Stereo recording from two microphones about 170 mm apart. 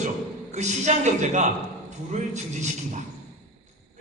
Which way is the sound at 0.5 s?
45° right (ahead or behind).